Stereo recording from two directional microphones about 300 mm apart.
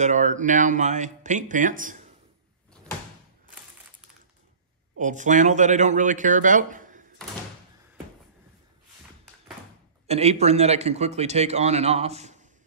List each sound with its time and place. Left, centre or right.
0.0 s a man's voice: right
4.9 s a man's voice: right
10.0 s a man's voice: right